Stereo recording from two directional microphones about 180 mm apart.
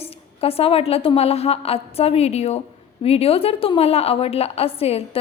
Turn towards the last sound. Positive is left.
turn(degrees=35)  # may be behind; listen again after turning